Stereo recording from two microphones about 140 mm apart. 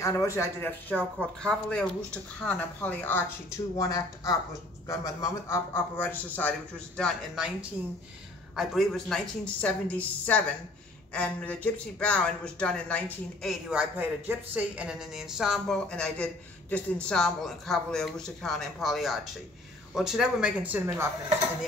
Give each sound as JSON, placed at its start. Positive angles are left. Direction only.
{"t": 0.0, "sound": "a man's voice", "side_deg": 20}
{"t": 7.0, "sound": "speech", "side_deg": 0}
{"t": 8.5, "sound": "speech", "side_deg": 0}